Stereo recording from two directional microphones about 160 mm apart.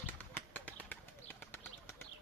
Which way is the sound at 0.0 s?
10° left (ahead or behind).